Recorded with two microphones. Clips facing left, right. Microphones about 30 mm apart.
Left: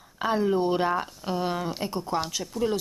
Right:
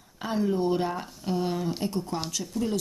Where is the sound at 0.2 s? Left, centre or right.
Left.